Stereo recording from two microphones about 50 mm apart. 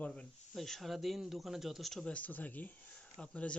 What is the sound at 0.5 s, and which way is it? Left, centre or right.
Speech, centre.